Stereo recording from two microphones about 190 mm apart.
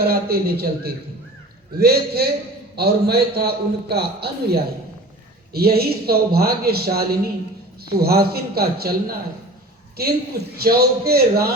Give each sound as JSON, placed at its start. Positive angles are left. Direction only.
{"t": 0.0, "sound": "a man's voice", "side_deg": -55}
{"t": 10.6, "sound": "a man's voice", "side_deg": -55}